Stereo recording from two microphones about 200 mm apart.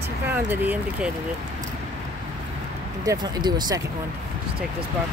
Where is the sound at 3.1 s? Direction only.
20° right (ahead or behind).